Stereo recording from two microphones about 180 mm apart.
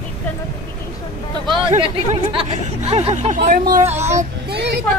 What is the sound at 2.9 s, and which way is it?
Speech, 35° right (ahead or behind).